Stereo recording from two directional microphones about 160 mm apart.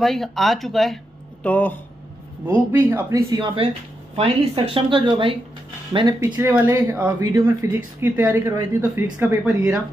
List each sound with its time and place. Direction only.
0.0 s speech: centre (ahead or behind)
2.4 s speech: 15° right (ahead or behind)